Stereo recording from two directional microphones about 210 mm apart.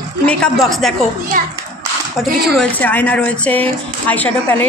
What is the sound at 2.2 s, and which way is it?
Speech, 5° left (ahead or behind).